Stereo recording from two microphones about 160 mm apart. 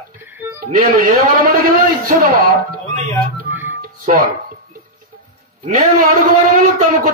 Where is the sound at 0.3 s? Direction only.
10° right (ahead or behind).